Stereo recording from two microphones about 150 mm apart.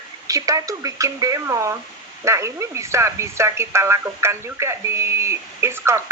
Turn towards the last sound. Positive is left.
turn(degrees=-15)  # may be behind; listen again after turning